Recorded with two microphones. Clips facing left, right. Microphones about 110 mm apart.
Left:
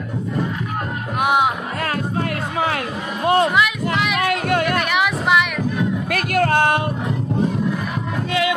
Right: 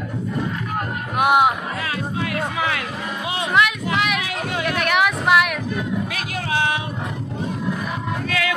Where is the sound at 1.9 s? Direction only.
45° left (ahead or behind).